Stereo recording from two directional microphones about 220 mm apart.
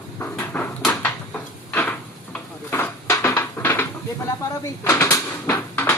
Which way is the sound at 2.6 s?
10° left (ahead or behind).